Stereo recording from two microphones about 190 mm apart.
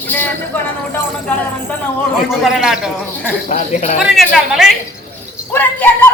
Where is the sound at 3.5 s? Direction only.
40° left (ahead or behind).